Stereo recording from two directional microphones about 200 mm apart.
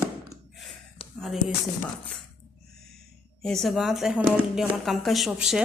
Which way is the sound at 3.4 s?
Centre (ahead or behind).